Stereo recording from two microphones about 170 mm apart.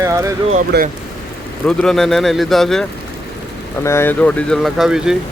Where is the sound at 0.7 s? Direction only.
80° right.